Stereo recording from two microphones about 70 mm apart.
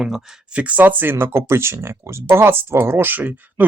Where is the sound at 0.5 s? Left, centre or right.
Right.